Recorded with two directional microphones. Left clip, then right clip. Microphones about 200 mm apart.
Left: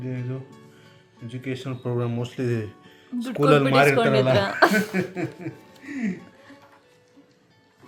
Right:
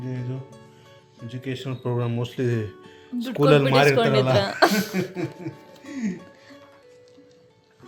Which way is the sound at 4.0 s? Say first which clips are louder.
Even; centre (ahead or behind).